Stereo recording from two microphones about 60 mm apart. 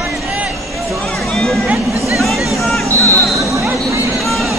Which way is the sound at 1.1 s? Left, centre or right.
Centre.